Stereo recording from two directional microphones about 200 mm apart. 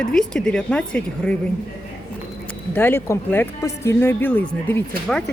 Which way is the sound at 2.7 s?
10° left (ahead or behind).